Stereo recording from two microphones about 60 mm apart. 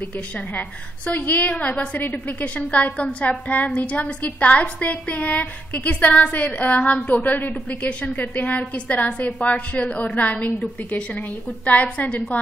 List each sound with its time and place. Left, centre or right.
0.6 s a woman's voice: left